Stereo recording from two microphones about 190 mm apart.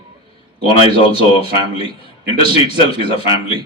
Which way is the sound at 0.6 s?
30° left (ahead or behind).